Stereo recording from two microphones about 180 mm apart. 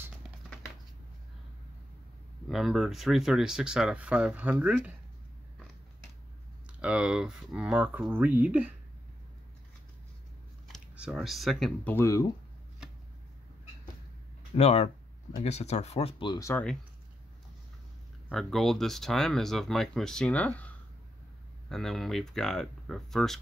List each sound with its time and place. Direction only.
2.4 s speech: centre (ahead or behind)
6.8 s speech: 5° right (ahead or behind)
10.7 s speech: centre (ahead or behind)
11.9 s speech: 15° left (ahead or behind)
14.5 s speech: 35° left (ahead or behind)
16.4 s speech: 10° left (ahead or behind)
18.3 s speech: centre (ahead or behind)